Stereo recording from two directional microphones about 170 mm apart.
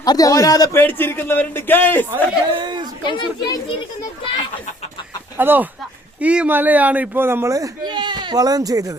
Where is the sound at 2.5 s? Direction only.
25° right (ahead or behind).